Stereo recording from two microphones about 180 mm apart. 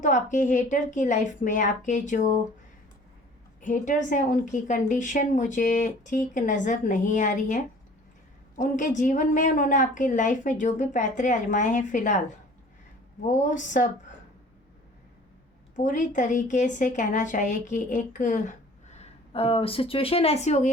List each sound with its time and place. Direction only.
0.0 s a woman's voice: 45° left (ahead or behind)
3.6 s a woman's voice: 45° left (ahead or behind)
13.2 s a woman's voice: 45° left (ahead or behind)
15.7 s a woman's voice: 45° left (ahead or behind)